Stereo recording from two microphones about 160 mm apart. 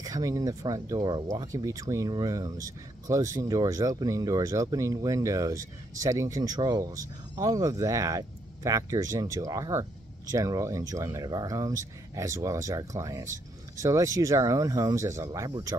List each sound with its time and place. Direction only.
0.0 s speech: 20° right (ahead or behind)